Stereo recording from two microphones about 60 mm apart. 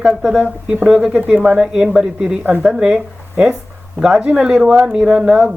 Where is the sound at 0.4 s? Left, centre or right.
Centre.